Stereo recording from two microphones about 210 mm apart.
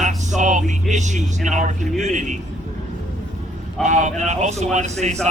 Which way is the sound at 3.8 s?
35° right (ahead or behind).